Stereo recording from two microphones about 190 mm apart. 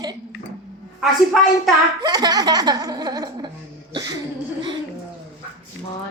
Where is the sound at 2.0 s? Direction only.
20° right (ahead or behind).